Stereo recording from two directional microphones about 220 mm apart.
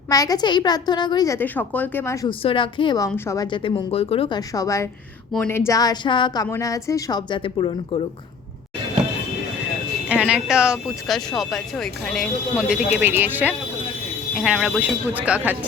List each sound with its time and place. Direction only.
0.1 s speech: 15° left (ahead or behind)
2.4 s a woman's voice: 25° left (ahead or behind)
10.1 s speech: 5° right (ahead or behind)